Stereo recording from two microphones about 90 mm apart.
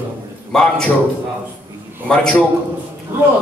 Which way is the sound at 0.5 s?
5° left (ahead or behind).